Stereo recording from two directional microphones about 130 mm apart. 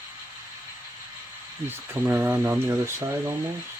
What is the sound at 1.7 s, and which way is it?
Speech, 15° right (ahead or behind).